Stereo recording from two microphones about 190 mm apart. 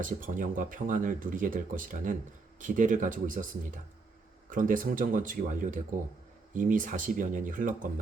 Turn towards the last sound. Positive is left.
turn(degrees=-45)  # may be behind; listen again after turning